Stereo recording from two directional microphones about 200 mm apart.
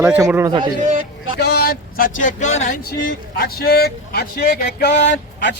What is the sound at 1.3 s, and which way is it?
Speech, 55° left (ahead or behind).